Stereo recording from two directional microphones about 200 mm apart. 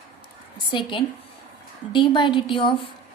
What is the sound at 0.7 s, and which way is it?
A woman's voice, 25° left (ahead or behind).